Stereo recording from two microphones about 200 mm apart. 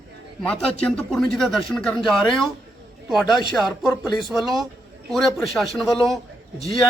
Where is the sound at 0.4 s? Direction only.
5° left (ahead or behind).